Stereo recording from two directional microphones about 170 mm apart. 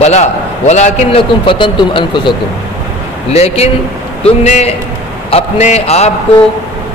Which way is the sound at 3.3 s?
40° left (ahead or behind).